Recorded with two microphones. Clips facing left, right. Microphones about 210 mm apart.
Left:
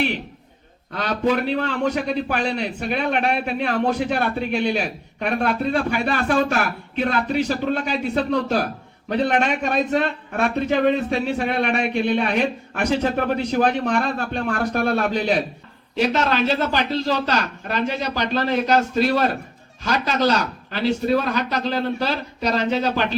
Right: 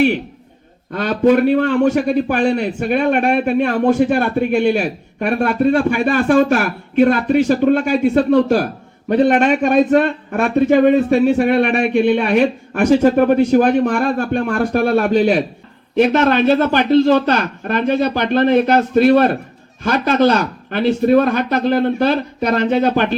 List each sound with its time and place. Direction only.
0.9 s a man's voice: 50° right (ahead or behind)